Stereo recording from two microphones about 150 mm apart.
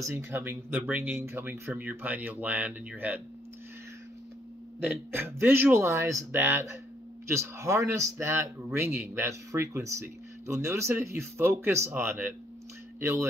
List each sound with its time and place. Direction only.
0.0 s speech: 15° right (ahead or behind)
4.8 s speech: 15° right (ahead or behind)